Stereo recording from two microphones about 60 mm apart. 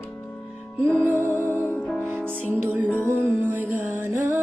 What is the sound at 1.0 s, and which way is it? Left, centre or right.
Music, right.